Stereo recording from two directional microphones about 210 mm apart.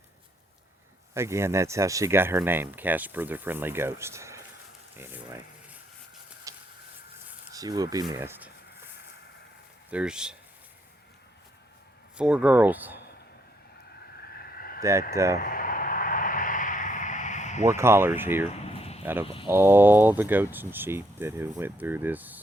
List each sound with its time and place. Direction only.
1.1 s speech: 10° right (ahead or behind)
6.5 s a sound: 15° right (ahead or behind)
7.3 s speech: 15° right (ahead or behind)
9.9 s speech: 5° right (ahead or behind)
12.1 s speech: 5° right (ahead or behind)
14.3 s a sound: 45° left (ahead or behind)
14.8 s speech: 15° right (ahead or behind)
15.4 s a sound: 40° left (ahead or behind)
17.7 s speech: 10° right (ahead or behind)
18.6 s a sound: 30° left (ahead or behind)
19.2 s speech: 25° left (ahead or behind)
19.5 s speech: 10° right (ahead or behind)